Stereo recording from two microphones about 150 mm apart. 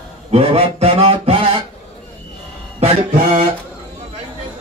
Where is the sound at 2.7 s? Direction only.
40° right (ahead or behind).